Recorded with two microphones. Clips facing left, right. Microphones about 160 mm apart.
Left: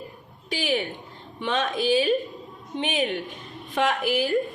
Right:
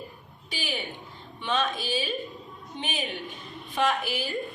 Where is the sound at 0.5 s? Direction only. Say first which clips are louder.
Left 9 dB; 90° left.